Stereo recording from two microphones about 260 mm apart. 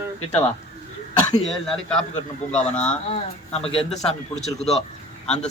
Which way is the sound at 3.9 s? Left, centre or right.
Centre.